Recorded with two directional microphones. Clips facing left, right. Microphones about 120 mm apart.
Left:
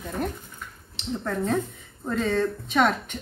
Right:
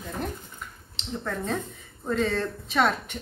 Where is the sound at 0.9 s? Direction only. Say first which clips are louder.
Left 3 dB; 5° left (ahead or behind).